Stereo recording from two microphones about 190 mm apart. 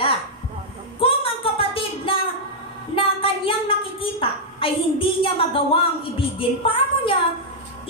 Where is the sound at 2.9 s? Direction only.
30° left (ahead or behind).